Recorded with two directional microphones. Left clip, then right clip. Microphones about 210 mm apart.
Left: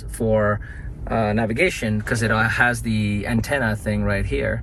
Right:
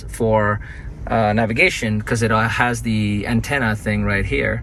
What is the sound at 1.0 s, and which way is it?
Speech, 5° right (ahead or behind).